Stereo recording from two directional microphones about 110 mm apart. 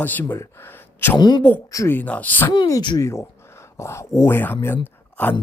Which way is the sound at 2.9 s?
25° left (ahead or behind).